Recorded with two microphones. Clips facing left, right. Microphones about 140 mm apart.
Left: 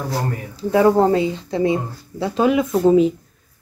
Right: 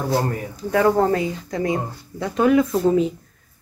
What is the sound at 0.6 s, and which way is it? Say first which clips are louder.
Speech: left 3 dB; 20° left (ahead or behind).